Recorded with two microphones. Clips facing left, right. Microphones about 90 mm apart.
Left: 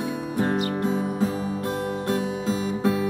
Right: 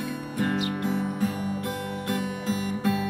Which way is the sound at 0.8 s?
30° left (ahead or behind).